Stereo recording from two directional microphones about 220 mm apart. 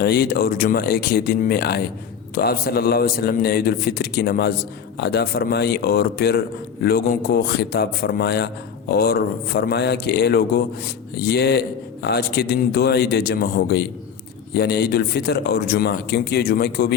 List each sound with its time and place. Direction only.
0.0 s a man's voice: 45° left (ahead or behind)